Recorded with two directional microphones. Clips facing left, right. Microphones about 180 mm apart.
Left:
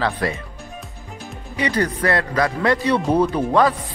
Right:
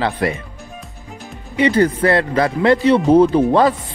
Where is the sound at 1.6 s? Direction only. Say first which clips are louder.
Right 7 dB; 25° right (ahead or behind).